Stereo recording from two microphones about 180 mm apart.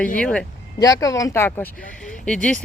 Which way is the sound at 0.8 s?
20° left (ahead or behind).